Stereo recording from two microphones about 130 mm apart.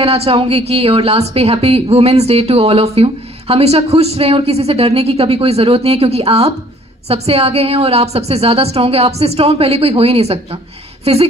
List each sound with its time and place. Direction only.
0.0 s a woman's voice: 50° right (ahead or behind)